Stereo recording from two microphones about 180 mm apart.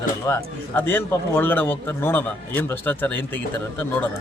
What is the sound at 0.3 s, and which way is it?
A man's voice, 15° left (ahead or behind).